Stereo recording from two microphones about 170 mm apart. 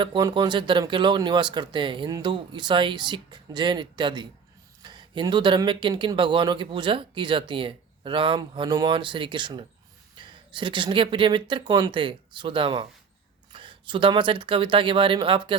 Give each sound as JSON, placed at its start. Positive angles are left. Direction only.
{"t": 0.0, "sound": "speech", "side_deg": -25}